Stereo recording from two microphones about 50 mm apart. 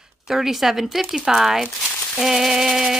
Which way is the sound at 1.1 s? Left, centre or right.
Centre.